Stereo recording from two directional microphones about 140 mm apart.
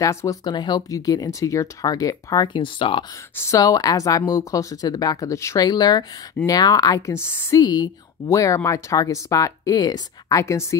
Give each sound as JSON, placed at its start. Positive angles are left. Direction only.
{"t": 0.0, "sound": "speech", "side_deg": 20}
{"t": 3.3, "sound": "speech", "side_deg": 20}
{"t": 7.6, "sound": "speech", "side_deg": 30}